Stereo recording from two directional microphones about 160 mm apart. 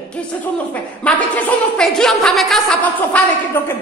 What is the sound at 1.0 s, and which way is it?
A man's voice, 5° left (ahead or behind).